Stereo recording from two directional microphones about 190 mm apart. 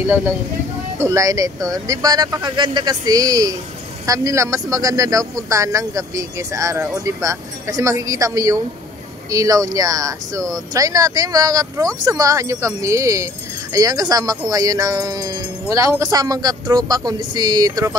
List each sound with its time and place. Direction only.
0.9 s speech: 15° right (ahead or behind)